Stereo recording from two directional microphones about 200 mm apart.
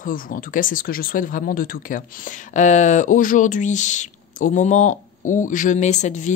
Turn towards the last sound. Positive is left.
turn(degrees=35)  # may be behind; listen again after turning